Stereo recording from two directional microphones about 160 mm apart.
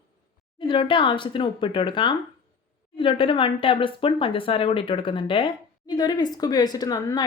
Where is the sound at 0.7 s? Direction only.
30° left (ahead or behind).